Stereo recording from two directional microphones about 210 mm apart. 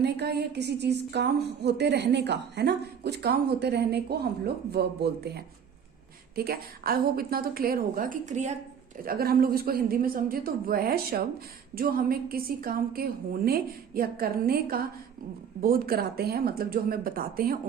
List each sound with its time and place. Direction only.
0.0 s a woman's voice: 50° right (ahead or behind); by 8.5 s 35° right (ahead or behind)
9.0 s a woman's voice: 45° right (ahead or behind)